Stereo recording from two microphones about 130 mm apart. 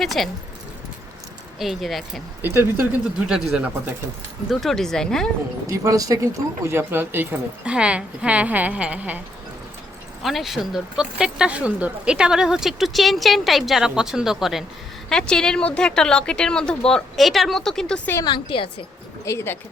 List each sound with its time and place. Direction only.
0.0 s speech: centre (ahead or behind)
1.5 s speech: centre (ahead or behind)
2.4 s speech: 20° right (ahead or behind)
3.2 s a woman's voice: 5° right (ahead or behind)
5.6 s a woman's voice: 25° right (ahead or behind)
10.2 s speech: centre (ahead or behind)
18.2 s a woman's voice: 35° left (ahead or behind)
19.2 s speech: 20° left (ahead or behind)